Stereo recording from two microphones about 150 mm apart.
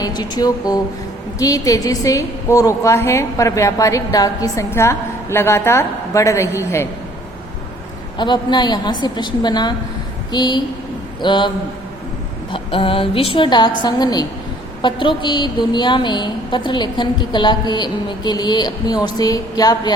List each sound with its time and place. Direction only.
0.0 s a woman's voice: 25° left (ahead or behind)
8.2 s a woman's voice: 30° left (ahead or behind)